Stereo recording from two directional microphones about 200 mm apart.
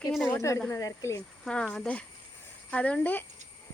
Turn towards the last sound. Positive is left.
turn(degrees=5)  # may be behind; listen again after turning